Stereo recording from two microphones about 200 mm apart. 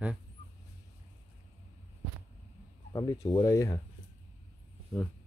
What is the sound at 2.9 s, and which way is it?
Speech, 15° left (ahead or behind).